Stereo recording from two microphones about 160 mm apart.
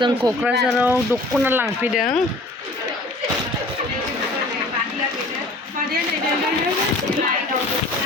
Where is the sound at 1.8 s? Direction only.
Centre (ahead or behind).